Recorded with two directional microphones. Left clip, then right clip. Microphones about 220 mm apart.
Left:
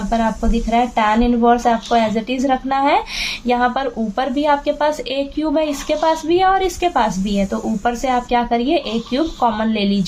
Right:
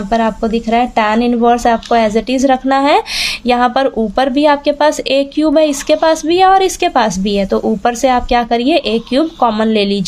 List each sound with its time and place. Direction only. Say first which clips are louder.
0.1 s speech: right 5 dB; 45° right (ahead or behind)